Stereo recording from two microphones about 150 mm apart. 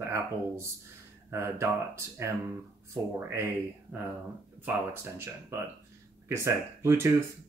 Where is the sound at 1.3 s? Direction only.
20° right (ahead or behind).